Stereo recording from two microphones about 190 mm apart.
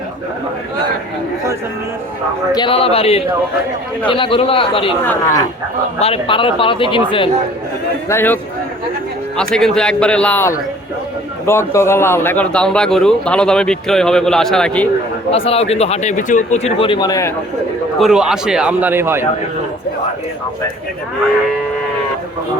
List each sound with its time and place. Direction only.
2.5 s speech: 25° left (ahead or behind)
5.0 s speech: 15° left (ahead or behind)
6.0 s speech: 30° left (ahead or behind)
8.1 s speech: 10° left (ahead or behind)
9.6 s a man's voice: centre (ahead or behind)
15.3 s speech: 30° left (ahead or behind)
18.0 s a man's voice: 5° right (ahead or behind)